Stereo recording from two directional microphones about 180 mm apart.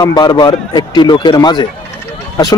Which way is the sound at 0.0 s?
20° left (ahead or behind).